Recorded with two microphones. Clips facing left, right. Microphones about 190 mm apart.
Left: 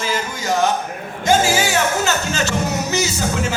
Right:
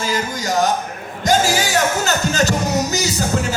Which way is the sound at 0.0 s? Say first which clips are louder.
Right 1 dB; 40° right (ahead or behind).